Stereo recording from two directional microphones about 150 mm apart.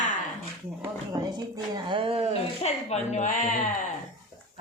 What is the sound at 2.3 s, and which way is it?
A woman's voice, 45° left (ahead or behind).